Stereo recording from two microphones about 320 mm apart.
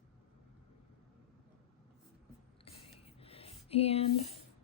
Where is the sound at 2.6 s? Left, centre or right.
Centre.